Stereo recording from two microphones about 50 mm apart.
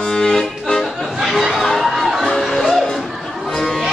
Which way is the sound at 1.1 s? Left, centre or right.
Centre.